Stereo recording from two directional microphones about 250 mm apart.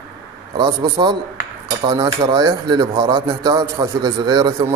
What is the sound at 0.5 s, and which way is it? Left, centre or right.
Speech, centre.